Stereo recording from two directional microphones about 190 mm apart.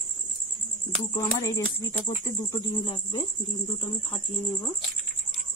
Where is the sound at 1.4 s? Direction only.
15° left (ahead or behind).